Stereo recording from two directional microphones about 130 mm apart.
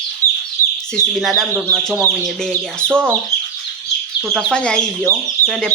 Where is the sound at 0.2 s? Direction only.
25° right (ahead or behind).